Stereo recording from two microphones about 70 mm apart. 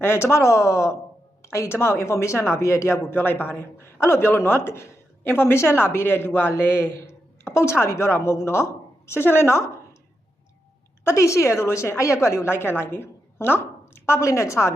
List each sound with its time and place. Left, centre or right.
0.0 s a man's voice: left
3.2 s a man's voice: left
11.0 s a man's voice: left